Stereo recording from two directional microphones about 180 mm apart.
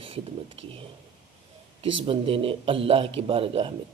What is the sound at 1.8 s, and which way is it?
Speech, 30° right (ahead or behind).